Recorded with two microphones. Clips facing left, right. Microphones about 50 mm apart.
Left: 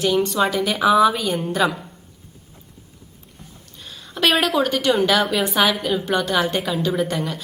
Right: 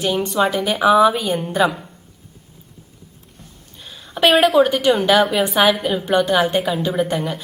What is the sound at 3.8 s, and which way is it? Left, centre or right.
A woman's voice, centre.